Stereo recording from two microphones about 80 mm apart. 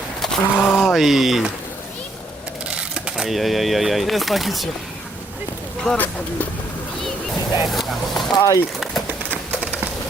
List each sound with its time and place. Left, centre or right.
0.2 s a sound: centre
0.5 s speech: centre
0.8 s speech: centre
2.6 s sewing machine: centre
3.2 s speech: centre
5.9 s speech: centre
7.6 s a sound: centre
8.4 s speech: left